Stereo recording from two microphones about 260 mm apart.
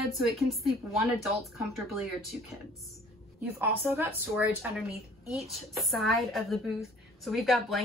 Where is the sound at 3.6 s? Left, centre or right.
Centre.